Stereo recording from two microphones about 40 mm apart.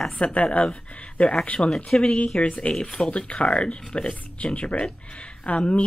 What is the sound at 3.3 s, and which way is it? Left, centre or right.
Speech, left.